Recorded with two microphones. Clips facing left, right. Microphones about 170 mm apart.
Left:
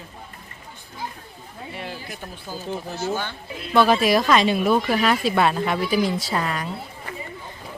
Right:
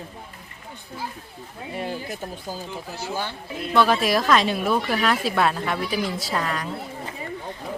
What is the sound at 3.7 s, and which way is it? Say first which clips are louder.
Speech: left 2 dB; centre (ahead or behind).